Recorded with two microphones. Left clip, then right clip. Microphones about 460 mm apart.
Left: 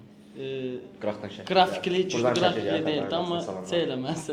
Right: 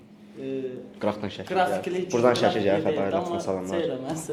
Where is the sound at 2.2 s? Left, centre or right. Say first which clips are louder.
Right 5 dB; right.